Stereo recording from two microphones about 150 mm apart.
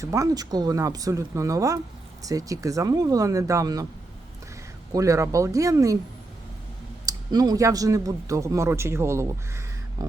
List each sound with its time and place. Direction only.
0.0 s speech: 20° right (ahead or behind)
4.9 s speech: 20° right (ahead or behind)
7.0 s speech: 25° right (ahead or behind)